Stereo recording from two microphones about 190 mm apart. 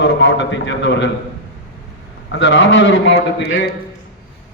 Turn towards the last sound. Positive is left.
turn(degrees=65)  # may be behind; listen again after turning